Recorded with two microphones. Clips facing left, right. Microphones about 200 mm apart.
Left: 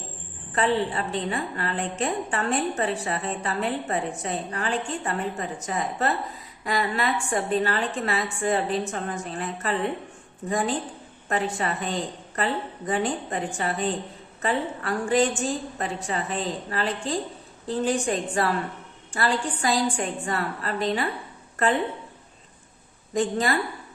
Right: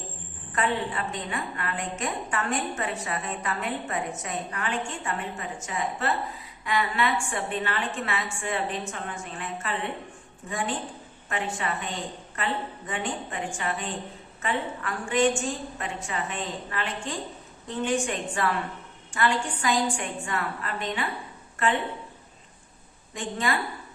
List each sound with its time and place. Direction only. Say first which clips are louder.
0.5 s a woman's voice: left 4 dB; 30° left (ahead or behind)
11.3 s a woman's voice: left 4 dB; 40° left (ahead or behind)
23.1 s a woman's voice: left 5 dB; 40° left (ahead or behind)